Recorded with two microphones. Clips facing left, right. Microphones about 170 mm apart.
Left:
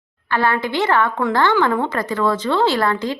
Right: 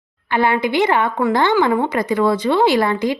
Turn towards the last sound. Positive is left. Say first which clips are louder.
# right 3 dB
turn(degrees=-15)  # may be behind; listen again after turning